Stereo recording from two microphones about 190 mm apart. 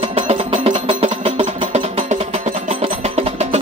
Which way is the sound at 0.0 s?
30° right (ahead or behind).